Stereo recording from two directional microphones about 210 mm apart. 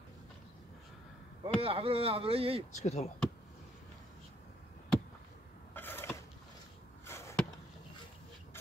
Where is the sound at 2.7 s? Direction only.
35° left (ahead or behind).